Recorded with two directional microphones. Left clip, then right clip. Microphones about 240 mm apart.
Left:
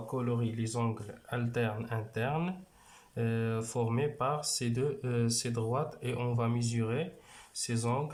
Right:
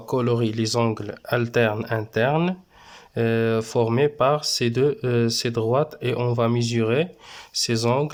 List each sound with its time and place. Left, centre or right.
0.1 s speech: right